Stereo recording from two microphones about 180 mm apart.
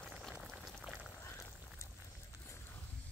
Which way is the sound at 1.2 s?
15° left (ahead or behind).